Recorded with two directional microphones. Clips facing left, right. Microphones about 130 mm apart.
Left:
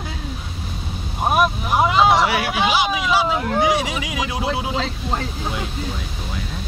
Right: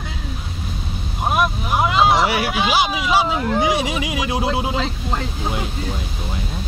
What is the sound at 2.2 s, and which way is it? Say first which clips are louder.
Speech: even; 30° right (ahead or behind).